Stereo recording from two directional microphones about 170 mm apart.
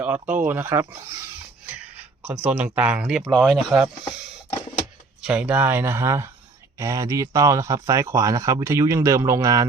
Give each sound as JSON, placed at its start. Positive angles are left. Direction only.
{"t": 0.0, "sound": "speech", "side_deg": -10}
{"t": 2.2, "sound": "speech", "side_deg": -10}
{"t": 5.2, "sound": "speech", "side_deg": -5}